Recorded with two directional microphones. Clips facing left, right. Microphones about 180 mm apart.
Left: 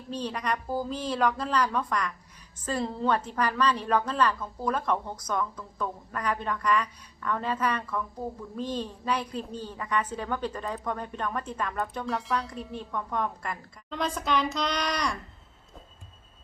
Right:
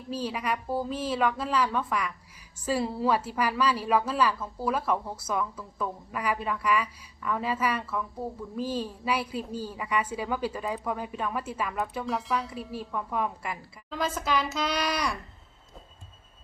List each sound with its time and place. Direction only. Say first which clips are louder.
0.1 s a woman's voice: even; 5° right (ahead or behind)